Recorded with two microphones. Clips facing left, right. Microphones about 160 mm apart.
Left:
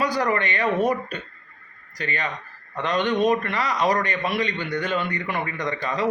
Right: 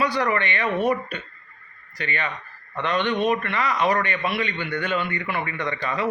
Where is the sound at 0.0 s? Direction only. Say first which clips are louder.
Even; 40° left (ahead or behind).